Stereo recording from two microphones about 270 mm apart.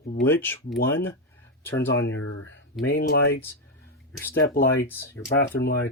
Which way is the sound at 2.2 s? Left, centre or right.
Left.